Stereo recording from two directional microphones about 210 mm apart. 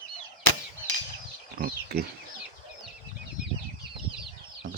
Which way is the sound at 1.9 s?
50° right (ahead or behind).